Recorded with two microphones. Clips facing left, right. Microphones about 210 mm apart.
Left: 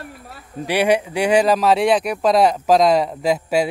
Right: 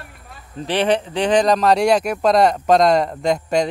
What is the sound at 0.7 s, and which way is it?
Speech, 10° left (ahead or behind).